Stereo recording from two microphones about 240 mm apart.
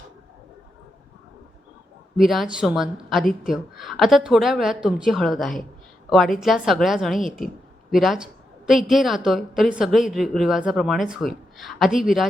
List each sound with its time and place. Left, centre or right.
2.1 s a woman's voice: centre